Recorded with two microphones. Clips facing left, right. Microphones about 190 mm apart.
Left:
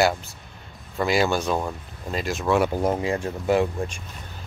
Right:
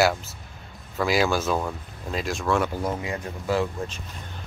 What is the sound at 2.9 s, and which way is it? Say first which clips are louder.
Speech: left 5 dB; 30° left (ahead or behind).